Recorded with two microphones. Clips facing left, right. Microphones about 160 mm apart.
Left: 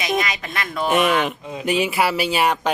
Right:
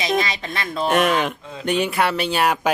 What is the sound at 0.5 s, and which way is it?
Speech, 30° right (ahead or behind).